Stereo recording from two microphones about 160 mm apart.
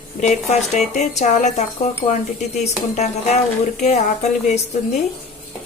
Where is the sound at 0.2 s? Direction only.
45° left (ahead or behind).